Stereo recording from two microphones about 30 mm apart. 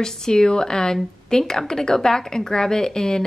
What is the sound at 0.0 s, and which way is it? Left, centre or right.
A woman's voice, left.